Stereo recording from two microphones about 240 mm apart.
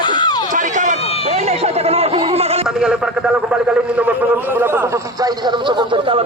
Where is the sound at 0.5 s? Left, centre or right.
Right.